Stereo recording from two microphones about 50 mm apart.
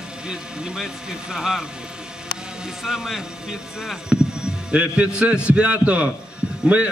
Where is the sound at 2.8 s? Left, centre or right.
Centre.